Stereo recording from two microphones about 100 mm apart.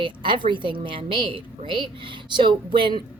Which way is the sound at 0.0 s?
55° right (ahead or behind).